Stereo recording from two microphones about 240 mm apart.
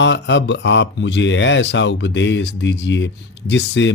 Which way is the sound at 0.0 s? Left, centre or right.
Left.